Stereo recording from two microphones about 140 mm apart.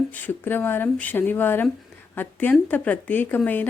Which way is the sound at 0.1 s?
15° left (ahead or behind).